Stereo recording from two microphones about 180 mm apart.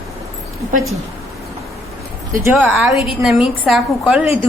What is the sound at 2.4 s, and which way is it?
A woman's voice, 10° right (ahead or behind).